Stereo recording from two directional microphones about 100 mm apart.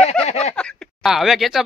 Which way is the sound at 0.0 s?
90° left.